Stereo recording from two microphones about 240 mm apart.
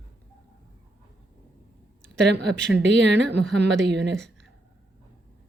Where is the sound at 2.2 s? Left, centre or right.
Right.